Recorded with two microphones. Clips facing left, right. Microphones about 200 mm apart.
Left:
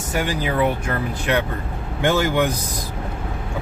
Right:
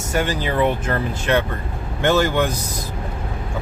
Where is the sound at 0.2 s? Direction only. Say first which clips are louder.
Right 1 dB; 10° left (ahead or behind).